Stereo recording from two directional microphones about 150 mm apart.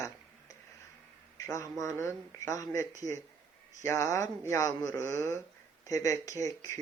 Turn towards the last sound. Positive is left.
turn(degrees=20)  # may be behind; listen again after turning